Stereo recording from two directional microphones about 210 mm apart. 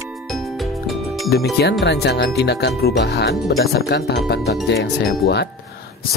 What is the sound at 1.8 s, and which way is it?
Speech, 50° left (ahead or behind).